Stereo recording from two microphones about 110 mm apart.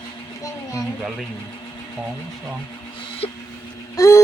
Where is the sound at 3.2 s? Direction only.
60° left (ahead or behind).